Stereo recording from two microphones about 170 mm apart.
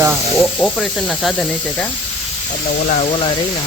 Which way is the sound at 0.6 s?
5° left (ahead or behind).